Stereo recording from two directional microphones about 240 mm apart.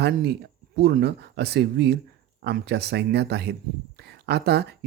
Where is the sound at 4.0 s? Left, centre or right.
Right.